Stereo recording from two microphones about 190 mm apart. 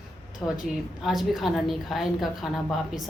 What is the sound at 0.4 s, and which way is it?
Speech, 15° left (ahead or behind).